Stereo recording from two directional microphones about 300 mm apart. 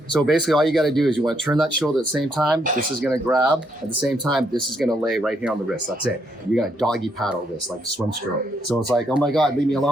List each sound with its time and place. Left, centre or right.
0.1 s speech: centre
8.7 s speech: centre